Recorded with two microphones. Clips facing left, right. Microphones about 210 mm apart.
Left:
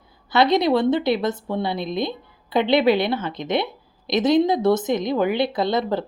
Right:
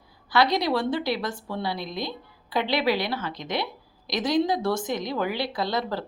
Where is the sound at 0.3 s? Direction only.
20° left (ahead or behind).